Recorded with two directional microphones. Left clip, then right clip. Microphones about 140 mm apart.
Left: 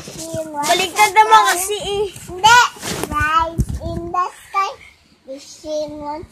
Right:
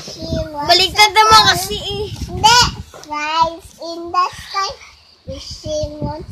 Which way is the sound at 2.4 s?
35° right (ahead or behind).